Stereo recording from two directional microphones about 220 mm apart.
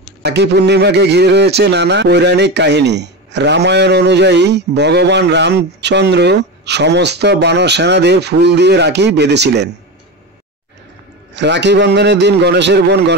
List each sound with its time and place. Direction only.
0.2 s a man's voice: 50° right (ahead or behind)
11.3 s a man's voice: 55° right (ahead or behind)